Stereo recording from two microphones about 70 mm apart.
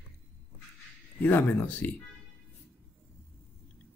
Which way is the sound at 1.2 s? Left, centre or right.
Left.